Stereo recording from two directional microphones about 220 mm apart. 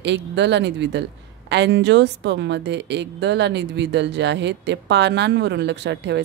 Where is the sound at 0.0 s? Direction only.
50° right (ahead or behind).